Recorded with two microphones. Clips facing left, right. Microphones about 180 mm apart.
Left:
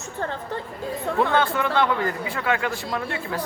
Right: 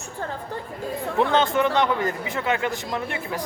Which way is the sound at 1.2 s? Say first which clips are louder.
Right 2 dB; 20° right (ahead or behind).